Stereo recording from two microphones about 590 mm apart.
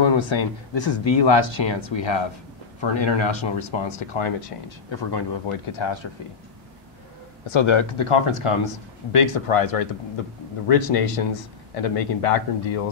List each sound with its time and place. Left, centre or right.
0.0 s speech: left
7.5 s speech: left